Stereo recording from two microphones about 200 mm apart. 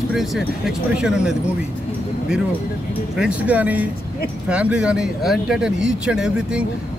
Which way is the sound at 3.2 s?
5° right (ahead or behind).